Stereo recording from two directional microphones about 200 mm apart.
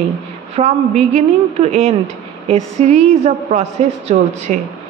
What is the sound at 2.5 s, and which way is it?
A woman's voice, 30° right (ahead or behind).